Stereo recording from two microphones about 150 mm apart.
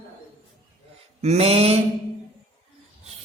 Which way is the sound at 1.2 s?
45° right (ahead or behind).